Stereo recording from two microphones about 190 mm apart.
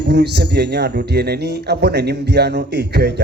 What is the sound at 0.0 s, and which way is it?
A man's voice, 60° right (ahead or behind).